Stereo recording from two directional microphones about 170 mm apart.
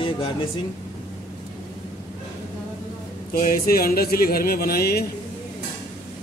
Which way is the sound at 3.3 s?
55° left (ahead or behind).